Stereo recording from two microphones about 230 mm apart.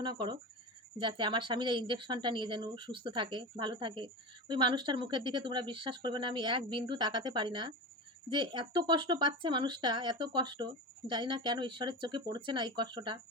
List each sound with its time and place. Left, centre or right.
0.0 s speech: centre